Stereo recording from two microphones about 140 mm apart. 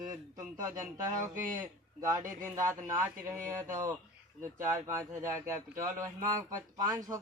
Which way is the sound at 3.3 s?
20° right (ahead or behind).